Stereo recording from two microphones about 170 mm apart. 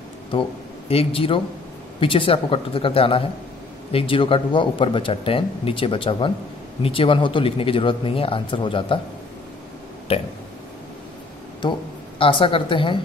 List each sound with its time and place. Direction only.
0.3 s a man's voice: 35° left (ahead or behind)
10.1 s burping: 35° left (ahead or behind)
12.2 s a woman's voice: 30° left (ahead or behind)